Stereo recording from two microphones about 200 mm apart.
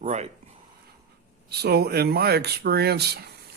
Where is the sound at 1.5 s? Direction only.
55° right (ahead or behind).